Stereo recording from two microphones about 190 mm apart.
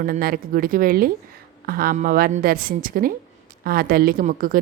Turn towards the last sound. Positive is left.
turn(degrees=-45)  # may be behind; listen again after turning